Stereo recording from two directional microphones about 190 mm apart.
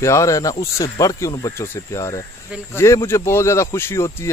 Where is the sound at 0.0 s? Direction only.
15° left (ahead or behind).